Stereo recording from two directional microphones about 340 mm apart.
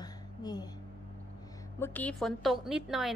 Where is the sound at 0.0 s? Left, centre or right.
Centre.